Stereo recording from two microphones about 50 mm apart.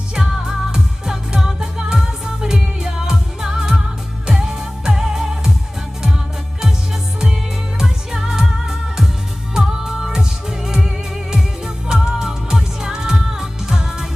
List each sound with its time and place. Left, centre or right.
0.1 s music: centre
7.8 s music: centre